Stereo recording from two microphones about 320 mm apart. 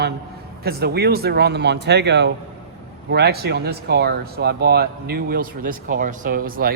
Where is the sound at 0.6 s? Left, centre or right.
Right.